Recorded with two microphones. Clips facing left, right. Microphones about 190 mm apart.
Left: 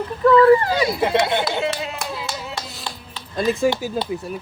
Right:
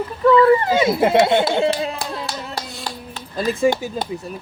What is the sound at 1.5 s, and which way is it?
Speech, 30° right (ahead or behind).